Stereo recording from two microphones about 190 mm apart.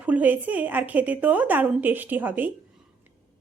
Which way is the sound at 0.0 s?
10° right (ahead or behind).